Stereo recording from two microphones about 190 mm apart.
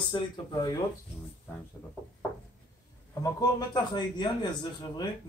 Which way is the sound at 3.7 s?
25° left (ahead or behind).